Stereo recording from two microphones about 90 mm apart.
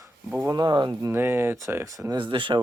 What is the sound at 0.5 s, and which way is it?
Speech, 55° right (ahead or behind).